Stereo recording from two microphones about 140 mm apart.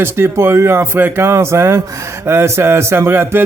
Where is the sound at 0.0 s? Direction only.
15° right (ahead or behind).